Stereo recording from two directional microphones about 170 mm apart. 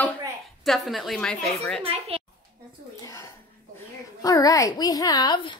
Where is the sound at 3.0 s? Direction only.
20° left (ahead or behind).